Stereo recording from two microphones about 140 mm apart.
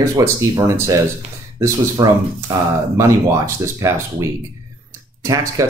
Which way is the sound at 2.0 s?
25° right (ahead or behind).